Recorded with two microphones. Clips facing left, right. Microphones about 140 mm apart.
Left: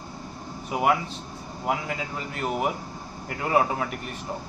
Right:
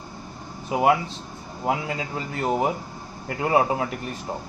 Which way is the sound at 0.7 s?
30° right (ahead or behind).